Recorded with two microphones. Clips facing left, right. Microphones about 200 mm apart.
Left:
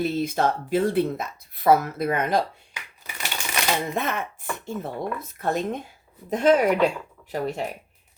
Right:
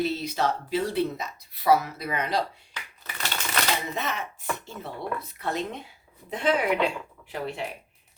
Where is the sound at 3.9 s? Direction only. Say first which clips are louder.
Left 4 dB; 55° left (ahead or behind).